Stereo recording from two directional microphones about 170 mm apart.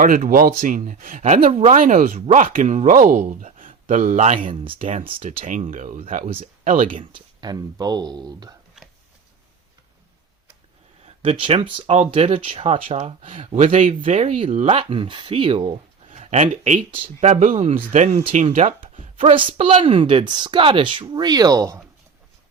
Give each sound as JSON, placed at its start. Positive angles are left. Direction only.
{"t": 0.0, "sound": "speech", "side_deg": -55}
{"t": 1.4, "sound": "speech", "side_deg": -40}
{"t": 4.6, "sound": "speech", "side_deg": -30}
{"t": 5.5, "sound": "speech", "side_deg": -45}
{"t": 6.9, "sound": "speech", "side_deg": -30}
{"t": 11.0, "sound": "speech", "side_deg": -35}